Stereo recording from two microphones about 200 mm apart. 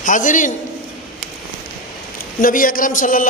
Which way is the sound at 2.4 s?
45° left (ahead or behind).